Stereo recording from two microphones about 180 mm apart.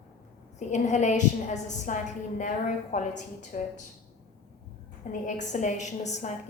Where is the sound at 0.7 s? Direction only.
40° left (ahead or behind).